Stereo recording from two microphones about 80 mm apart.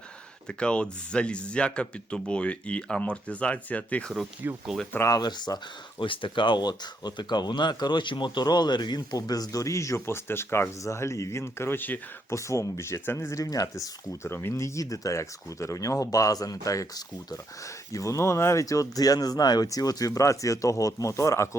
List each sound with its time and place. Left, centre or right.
0.4 s speech: centre
4.4 s speech: right
5.1 s speech: left
6.0 s speech: left
12.3 s speech: left